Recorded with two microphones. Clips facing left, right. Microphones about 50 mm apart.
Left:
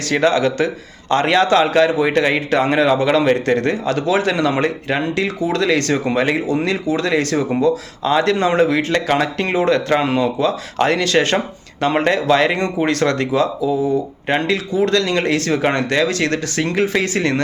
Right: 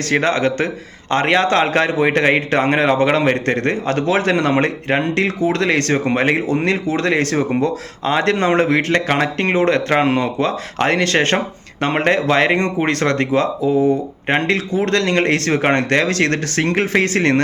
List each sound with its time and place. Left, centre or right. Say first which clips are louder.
0.1 s a man's voice: left 1 dB; right